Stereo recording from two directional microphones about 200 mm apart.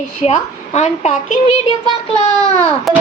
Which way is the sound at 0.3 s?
35° left (ahead or behind).